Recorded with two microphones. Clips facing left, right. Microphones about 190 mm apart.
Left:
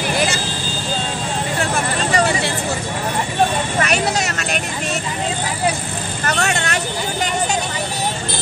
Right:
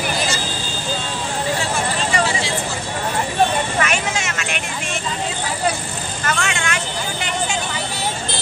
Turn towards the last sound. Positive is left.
turn(degrees=40)  # may be behind; listen again after turning